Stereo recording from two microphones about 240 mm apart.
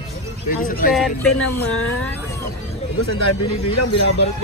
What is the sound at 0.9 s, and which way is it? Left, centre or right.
Speech, centre.